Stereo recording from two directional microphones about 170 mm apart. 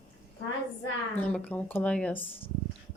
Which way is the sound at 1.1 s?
5° left (ahead or behind).